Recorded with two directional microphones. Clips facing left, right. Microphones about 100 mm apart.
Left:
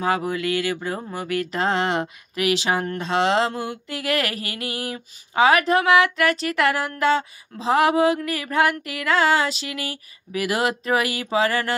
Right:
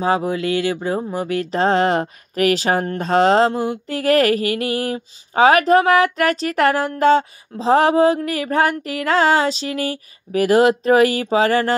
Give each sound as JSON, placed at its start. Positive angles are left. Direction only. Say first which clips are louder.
{"t": 0.0, "sound": "speech", "louder": "right 4 dB", "side_deg": -25}